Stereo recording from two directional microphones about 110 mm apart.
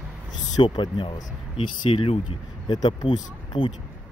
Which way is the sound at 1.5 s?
60° left (ahead or behind).